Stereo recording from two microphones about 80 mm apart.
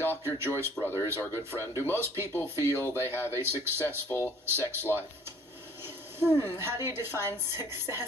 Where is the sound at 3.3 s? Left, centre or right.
Right.